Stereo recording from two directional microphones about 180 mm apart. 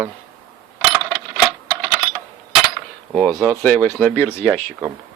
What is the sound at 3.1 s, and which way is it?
Speech, centre (ahead or behind).